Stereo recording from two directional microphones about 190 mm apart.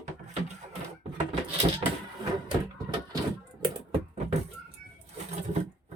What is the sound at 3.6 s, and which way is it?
Typing, 30° right (ahead or behind).